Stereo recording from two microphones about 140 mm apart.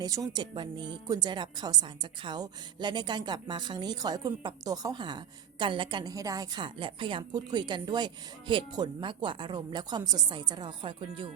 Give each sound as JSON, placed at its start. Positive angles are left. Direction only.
{"t": 0.0, "sound": "a woman's voice", "side_deg": -25}